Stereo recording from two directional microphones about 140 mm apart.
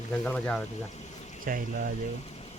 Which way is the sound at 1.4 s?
90° right.